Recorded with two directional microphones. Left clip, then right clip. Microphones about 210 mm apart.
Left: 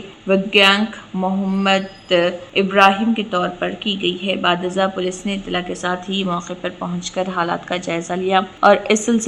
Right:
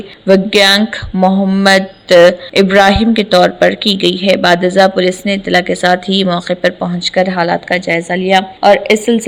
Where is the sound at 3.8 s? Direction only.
90° right.